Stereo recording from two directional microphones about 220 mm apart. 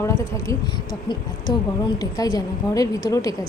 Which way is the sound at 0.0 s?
15° left (ahead or behind).